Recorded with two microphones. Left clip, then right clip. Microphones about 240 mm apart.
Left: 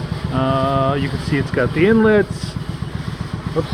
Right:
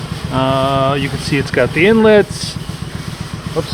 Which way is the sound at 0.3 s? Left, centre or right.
Right.